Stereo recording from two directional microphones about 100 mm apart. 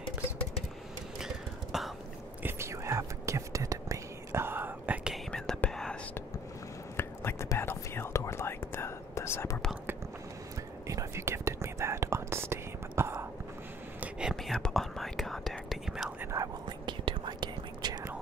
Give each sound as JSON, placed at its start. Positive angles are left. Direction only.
{"t": 1.2, "sound": "a sound", "side_deg": 0}
{"t": 2.4, "sound": "whispering", "side_deg": -25}
{"t": 5.1, "sound": "whispering", "side_deg": 5}
{"t": 7.0, "sound": "whispering", "side_deg": 25}
{"t": 10.9, "sound": "whispering", "side_deg": -30}
{"t": 13.9, "sound": "whispering", "side_deg": -15}
{"t": 14.3, "sound": "whispering", "side_deg": 5}
{"t": 16.2, "sound": "whispering", "side_deg": -30}
{"t": 16.6, "sound": "whispering", "side_deg": -55}